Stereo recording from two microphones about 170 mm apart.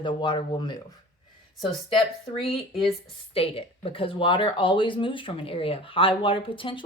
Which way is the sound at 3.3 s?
35° left (ahead or behind).